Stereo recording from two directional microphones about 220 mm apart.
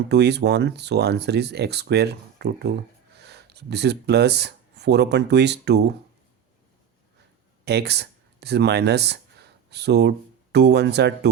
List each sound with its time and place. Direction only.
0.1 s speech: 50° right (ahead or behind)
7.6 s speech: 50° right (ahead or behind)